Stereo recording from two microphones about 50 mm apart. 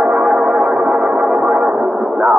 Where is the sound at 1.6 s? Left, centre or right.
Right.